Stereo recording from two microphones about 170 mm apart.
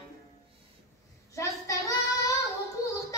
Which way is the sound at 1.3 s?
20° left (ahead or behind).